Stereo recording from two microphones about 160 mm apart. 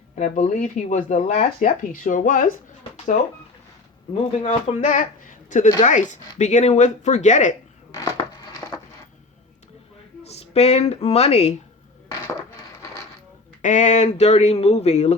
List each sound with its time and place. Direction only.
0.2 s speech: 50° left (ahead or behind)
1.5 s speech: 60° left (ahead or behind)
4.1 s speech: 45° left (ahead or behind)
10.2 s speech: 40° left (ahead or behind)
13.6 s speech: 50° left (ahead or behind)